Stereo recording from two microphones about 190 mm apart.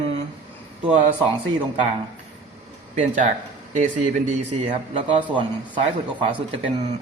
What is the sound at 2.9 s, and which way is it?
Speech, 40° right (ahead or behind).